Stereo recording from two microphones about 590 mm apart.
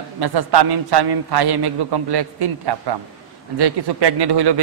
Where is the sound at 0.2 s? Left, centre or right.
Right.